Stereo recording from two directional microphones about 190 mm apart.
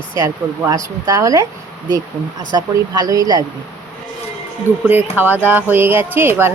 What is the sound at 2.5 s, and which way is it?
Speech, 20° right (ahead or behind).